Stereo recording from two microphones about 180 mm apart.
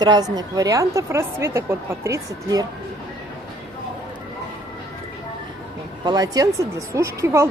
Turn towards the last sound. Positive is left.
turn(degrees=-15)  # may be behind; listen again after turning